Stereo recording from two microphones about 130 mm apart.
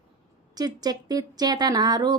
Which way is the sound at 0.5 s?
30° right (ahead or behind).